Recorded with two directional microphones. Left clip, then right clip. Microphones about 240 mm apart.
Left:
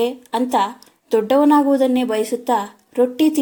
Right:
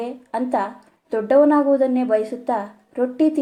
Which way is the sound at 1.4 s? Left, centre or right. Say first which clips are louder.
Right 1 dB; left.